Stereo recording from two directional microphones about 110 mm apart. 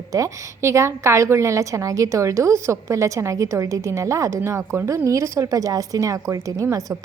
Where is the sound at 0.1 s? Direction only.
30° right (ahead or behind).